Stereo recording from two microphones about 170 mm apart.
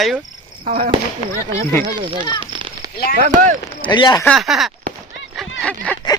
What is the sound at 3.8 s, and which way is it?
Speech, 25° left (ahead or behind).